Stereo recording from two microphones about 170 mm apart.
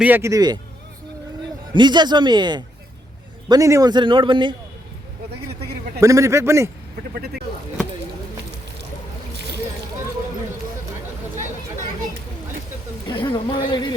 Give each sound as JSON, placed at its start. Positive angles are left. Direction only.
{"t": 0.0, "sound": "speech", "side_deg": -15}
{"t": 1.7, "sound": "a man's voice", "side_deg": -25}
{"t": 6.0, "sound": "speech", "side_deg": -20}
{"t": 13.1, "sound": "speech", "side_deg": 30}